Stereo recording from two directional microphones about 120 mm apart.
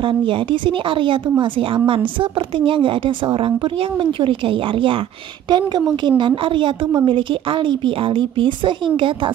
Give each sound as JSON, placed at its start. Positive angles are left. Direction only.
{"t": 0.0, "sound": "a woman's voice", "side_deg": -45}